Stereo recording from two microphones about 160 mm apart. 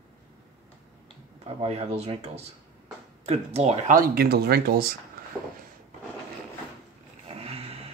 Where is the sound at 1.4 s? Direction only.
40° right (ahead or behind).